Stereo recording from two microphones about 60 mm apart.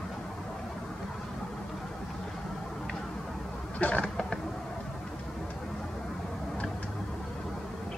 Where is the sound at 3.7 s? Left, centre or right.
Left.